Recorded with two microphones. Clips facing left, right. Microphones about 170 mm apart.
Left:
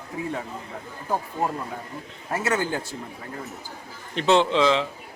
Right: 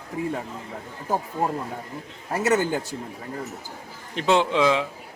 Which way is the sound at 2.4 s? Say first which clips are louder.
Right 4 dB; 40° right (ahead or behind).